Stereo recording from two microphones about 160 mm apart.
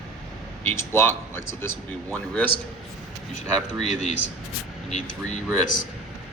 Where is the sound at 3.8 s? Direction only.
45° left (ahead or behind).